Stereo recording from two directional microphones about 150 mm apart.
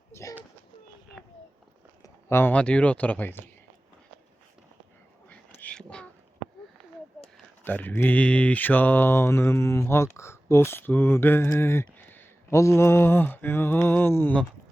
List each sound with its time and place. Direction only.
0.1 s bird: 20° left (ahead or behind)
2.0 s speech: 15° left (ahead or behind)
5.3 s whispering: 10° left (ahead or behind)
7.6 s mantra: 10° left (ahead or behind)